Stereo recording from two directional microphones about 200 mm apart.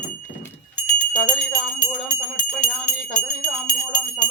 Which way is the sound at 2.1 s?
40° left (ahead or behind).